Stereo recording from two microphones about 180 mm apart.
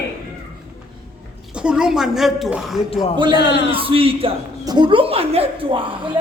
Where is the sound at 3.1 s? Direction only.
25° right (ahead or behind).